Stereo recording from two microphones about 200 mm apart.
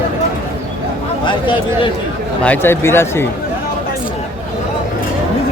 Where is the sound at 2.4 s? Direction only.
10° left (ahead or behind).